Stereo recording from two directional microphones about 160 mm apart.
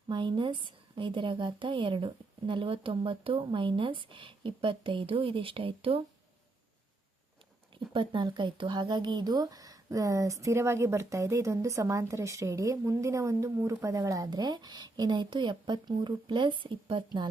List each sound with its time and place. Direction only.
0.1 s a woman's voice: 30° right (ahead or behind)
7.9 s speech: 30° right (ahead or behind)